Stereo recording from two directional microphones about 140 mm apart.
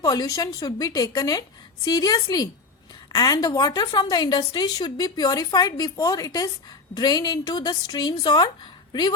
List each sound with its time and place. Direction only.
0.0 s a woman's voice: 25° left (ahead or behind)